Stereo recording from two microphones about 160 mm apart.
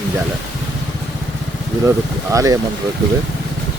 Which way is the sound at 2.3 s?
20° right (ahead or behind).